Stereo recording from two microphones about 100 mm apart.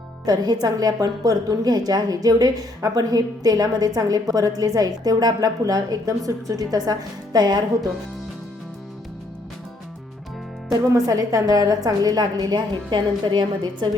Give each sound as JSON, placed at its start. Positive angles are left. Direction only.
{"t": 0.3, "sound": "a woman's voice", "side_deg": -40}
{"t": 10.7, "sound": "a woman's voice", "side_deg": -35}